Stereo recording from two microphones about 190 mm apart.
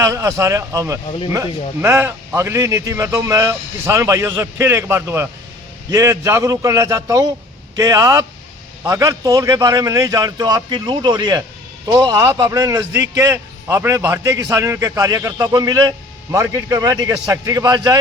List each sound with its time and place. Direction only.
0.0 s a man's voice: 15° right (ahead or behind)